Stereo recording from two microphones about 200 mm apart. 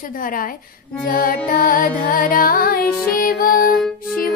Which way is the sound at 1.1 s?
45° left (ahead or behind).